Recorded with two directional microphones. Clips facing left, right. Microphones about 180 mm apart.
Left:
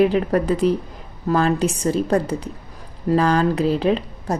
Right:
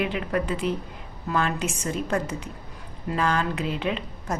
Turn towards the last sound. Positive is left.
turn(degrees=35)  # may be behind; listen again after turning